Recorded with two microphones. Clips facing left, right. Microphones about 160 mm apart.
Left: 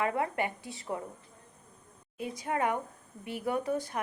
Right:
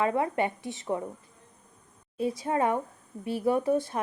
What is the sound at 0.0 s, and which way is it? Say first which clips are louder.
A woman's voice: right 4 dB; 25° right (ahead or behind).